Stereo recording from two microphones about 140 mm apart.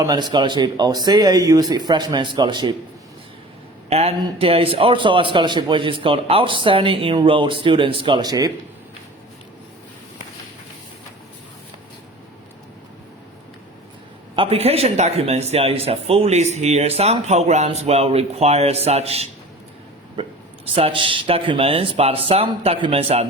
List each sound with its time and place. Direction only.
0.0 s a man's voice: 30° right (ahead or behind)
3.8 s a man's voice: 45° right (ahead or behind); by 8.5 s 30° right (ahead or behind)
14.3 s speech: 40° right (ahead or behind)
20.7 s speech: 40° right (ahead or behind)